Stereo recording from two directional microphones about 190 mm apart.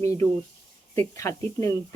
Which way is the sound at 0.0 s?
15° left (ahead or behind).